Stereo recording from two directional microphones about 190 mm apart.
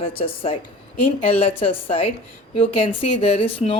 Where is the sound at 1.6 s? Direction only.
30° left (ahead or behind).